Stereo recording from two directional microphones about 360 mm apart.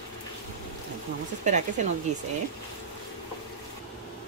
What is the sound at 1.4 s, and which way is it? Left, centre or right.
Speech, centre.